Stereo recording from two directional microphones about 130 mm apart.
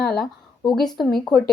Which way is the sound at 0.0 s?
5° left (ahead or behind).